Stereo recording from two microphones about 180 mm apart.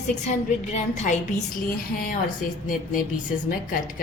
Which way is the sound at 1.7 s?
55° left (ahead or behind).